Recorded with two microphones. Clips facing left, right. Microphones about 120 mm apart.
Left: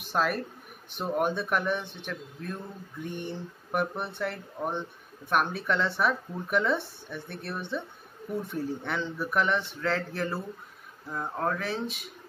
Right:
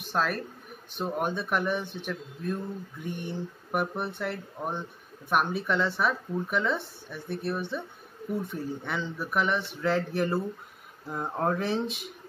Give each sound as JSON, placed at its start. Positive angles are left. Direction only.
{"t": 0.1, "sound": "speech", "side_deg": 5}
{"t": 9.8, "sound": "speech", "side_deg": -15}